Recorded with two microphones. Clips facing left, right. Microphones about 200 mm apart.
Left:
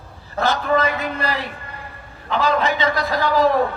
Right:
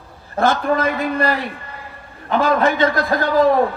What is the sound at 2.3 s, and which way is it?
Speech, 50° right (ahead or behind).